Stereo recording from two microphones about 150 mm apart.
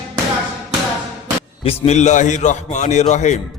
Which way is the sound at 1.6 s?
45° left (ahead or behind).